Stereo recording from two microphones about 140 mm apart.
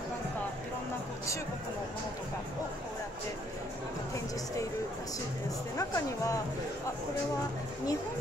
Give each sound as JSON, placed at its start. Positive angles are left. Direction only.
{"t": 5.8, "sound": "speech", "side_deg": 25}